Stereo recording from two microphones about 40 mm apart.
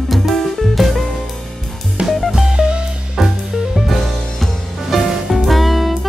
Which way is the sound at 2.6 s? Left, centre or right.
Right.